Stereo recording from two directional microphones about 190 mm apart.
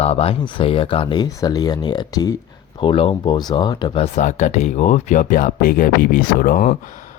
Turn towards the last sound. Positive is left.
turn(degrees=45)  # may be behind; listen again after turning